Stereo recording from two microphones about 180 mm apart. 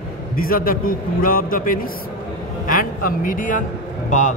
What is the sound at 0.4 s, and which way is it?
A man's voice, 50° left (ahead or behind).